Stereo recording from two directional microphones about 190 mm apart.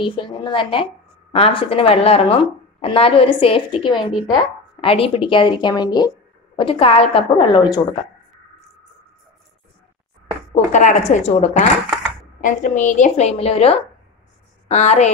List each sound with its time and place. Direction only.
0.0 s speech: 25° left (ahead or behind)
10.5 s a woman's voice: 40° left (ahead or behind)